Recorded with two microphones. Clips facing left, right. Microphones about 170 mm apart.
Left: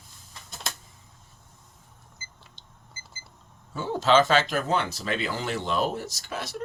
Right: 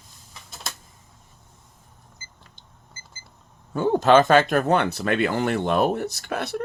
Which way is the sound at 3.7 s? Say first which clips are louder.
Right 5 dB; 55° right (ahead or behind).